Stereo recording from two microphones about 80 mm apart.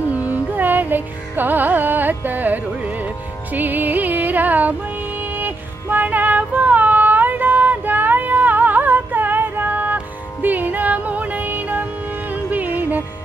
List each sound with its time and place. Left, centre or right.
0.2 s carnatic music: right
3.5 s music: right